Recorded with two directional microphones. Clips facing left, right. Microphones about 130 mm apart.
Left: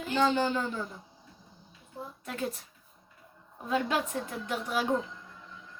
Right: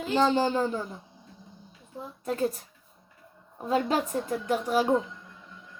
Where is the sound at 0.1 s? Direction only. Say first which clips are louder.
Right 3 dB; 30° right (ahead or behind).